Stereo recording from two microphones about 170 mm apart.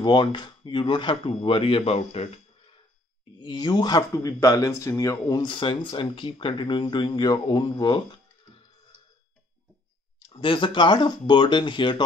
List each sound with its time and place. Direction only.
0.0 s speech: 25° left (ahead or behind)
3.3 s speech: 25° left (ahead or behind)
10.1 s speech: 30° left (ahead or behind)